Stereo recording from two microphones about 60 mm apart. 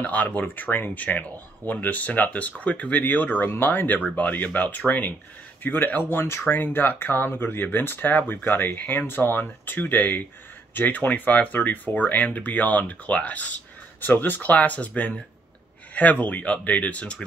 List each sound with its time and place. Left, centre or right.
0.0 s speech: left